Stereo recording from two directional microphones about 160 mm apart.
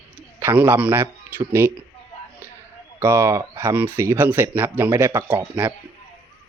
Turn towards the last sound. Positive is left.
turn(degrees=-10)  # may be behind; listen again after turning